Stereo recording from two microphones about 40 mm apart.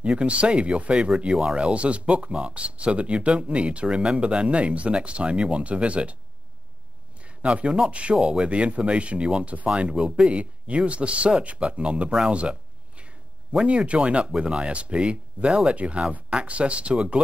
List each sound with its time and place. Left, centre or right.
0.0 s speech: right
1.3 s speech: right
7.2 s speech: right
12.3 s a sound: right
13.7 s speech: right